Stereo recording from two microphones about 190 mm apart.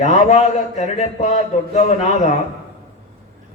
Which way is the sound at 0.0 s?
35° left (ahead or behind).